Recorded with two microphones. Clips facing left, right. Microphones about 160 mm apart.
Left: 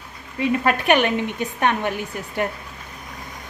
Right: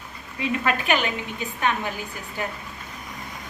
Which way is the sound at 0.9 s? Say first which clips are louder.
Left 6 dB; 65° left (ahead or behind).